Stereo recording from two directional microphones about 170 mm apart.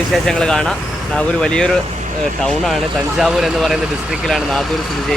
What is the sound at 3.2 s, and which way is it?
Speech, centre (ahead or behind).